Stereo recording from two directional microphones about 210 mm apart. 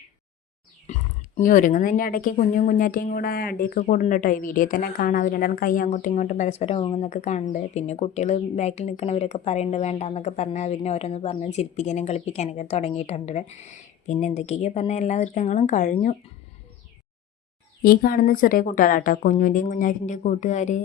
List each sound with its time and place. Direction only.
1.4 s speech: 40° left (ahead or behind)
17.8 s speech: 45° left (ahead or behind)